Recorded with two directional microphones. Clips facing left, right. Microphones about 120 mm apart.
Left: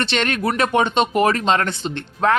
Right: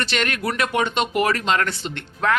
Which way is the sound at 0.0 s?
25° left (ahead or behind).